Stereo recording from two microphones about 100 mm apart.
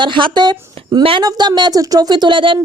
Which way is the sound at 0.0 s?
55° right (ahead or behind).